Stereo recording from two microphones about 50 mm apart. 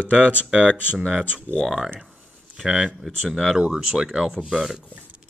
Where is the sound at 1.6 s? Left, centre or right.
Centre.